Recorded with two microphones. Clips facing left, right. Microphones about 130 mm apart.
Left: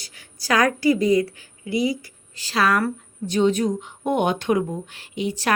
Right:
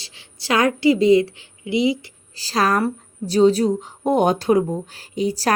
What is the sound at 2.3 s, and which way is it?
Speech, 35° right (ahead or behind).